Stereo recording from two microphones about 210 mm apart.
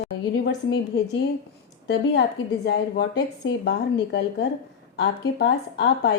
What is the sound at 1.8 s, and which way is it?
A woman's voice, 55° left (ahead or behind).